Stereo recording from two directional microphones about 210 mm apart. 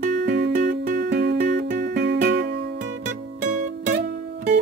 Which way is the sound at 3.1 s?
40° right (ahead or behind).